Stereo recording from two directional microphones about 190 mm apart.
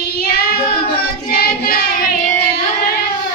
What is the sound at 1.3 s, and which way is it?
Child singing, 50° left (ahead or behind).